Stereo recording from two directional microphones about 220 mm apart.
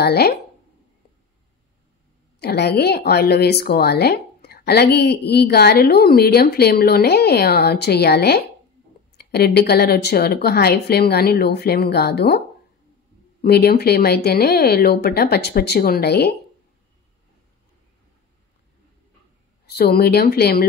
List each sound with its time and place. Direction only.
0.0 s a woman's voice: 45° left (ahead or behind)
2.4 s a woman's voice: 45° left (ahead or behind)
13.4 s a woman's voice: 45° left (ahead or behind)
19.8 s a woman's voice: 45° left (ahead or behind)